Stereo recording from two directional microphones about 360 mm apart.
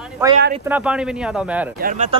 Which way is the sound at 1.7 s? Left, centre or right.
Right.